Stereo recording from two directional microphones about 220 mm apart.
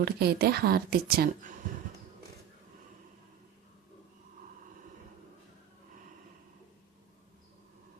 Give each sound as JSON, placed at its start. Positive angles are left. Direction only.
{"t": 0.0, "sound": "speech", "side_deg": -45}